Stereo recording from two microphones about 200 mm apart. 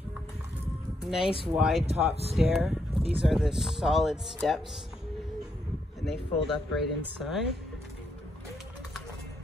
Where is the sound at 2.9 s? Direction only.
25° right (ahead or behind).